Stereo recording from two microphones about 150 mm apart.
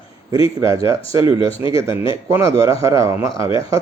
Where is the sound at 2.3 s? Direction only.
20° right (ahead or behind).